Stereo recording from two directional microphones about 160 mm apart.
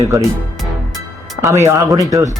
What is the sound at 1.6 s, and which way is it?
Speech, 20° right (ahead or behind).